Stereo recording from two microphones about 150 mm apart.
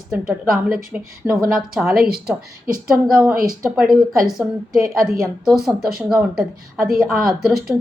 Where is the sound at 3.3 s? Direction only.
75° right (ahead or behind).